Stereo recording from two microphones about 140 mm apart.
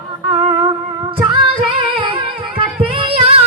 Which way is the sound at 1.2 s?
35° right (ahead or behind).